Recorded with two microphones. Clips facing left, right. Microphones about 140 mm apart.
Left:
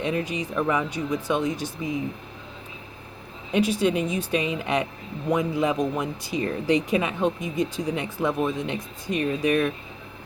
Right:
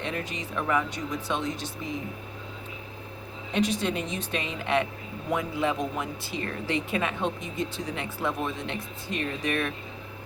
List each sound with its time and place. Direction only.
0.0 s speech: 15° left (ahead or behind)
3.5 s speech: 10° left (ahead or behind)